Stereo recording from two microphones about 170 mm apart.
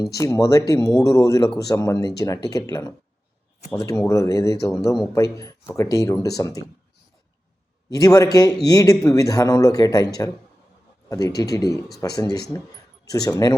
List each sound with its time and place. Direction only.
0.0 s speech: 20° left (ahead or behind)
7.9 s speech: 20° left (ahead or behind)
11.3 s speech: 20° left (ahead or behind)